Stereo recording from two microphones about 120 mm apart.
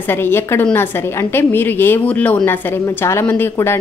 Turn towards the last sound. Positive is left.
turn(degrees=20)  # may be behind; listen again after turning